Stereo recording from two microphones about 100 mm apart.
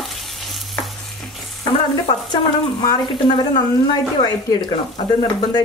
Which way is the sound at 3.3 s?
45° left (ahead or behind).